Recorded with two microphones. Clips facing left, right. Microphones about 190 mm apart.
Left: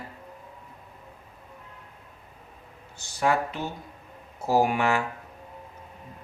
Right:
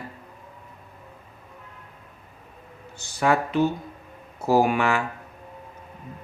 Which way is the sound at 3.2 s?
70° right (ahead or behind).